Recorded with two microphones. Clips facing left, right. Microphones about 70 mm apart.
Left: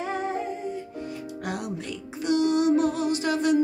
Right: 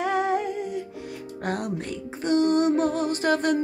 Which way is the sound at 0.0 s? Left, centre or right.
Right.